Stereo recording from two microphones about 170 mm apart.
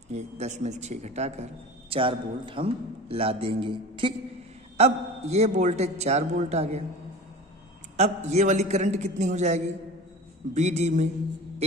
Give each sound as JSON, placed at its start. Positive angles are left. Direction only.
{"t": 0.1, "sound": "a man's voice", "side_deg": -40}
{"t": 8.0, "sound": "a man's voice", "side_deg": -40}